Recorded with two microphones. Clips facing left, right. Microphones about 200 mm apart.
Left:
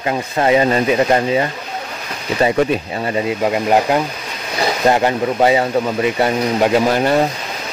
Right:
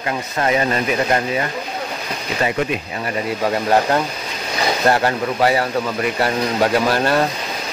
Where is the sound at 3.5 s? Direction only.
15° left (ahead or behind).